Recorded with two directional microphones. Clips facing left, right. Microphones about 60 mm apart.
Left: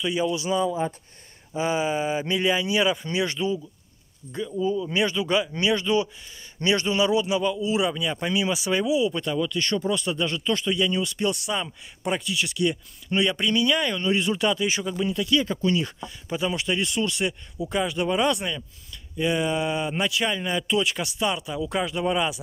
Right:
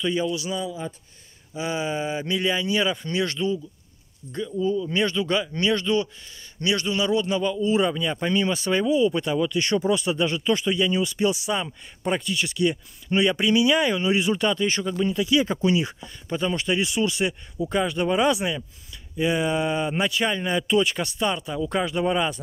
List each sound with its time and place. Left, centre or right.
0.0 s speech: centre
0.3 s speech: left
6.6 s speech: left; by 9.1 s centre
9.1 s speech: centre
15.4 s speech: centre
16.0 s speech: centre